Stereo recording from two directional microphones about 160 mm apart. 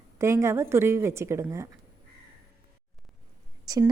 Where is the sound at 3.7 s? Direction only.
25° right (ahead or behind).